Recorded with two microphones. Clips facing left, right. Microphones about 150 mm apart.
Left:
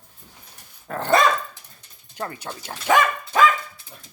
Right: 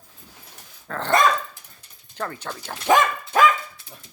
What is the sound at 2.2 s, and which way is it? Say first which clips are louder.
Speech: right 1 dB; 15° left (ahead or behind).